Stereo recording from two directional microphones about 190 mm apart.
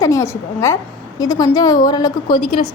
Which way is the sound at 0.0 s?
15° left (ahead or behind).